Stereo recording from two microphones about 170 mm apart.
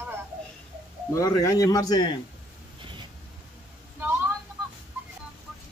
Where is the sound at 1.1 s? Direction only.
20° left (ahead or behind).